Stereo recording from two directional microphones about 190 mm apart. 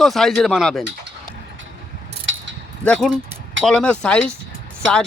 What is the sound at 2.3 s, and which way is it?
Mechanisms, 85° right.